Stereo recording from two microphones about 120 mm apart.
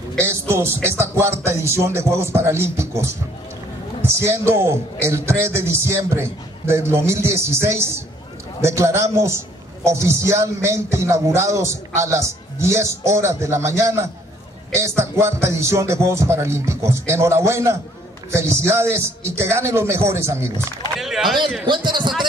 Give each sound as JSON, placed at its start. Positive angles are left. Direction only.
{"t": 0.2, "sound": "speech", "side_deg": -20}
{"t": 4.2, "sound": "speech", "side_deg": -20}
{"t": 21.0, "sound": "a man's voice", "side_deg": 0}
{"t": 21.6, "sound": "a man's voice", "side_deg": -40}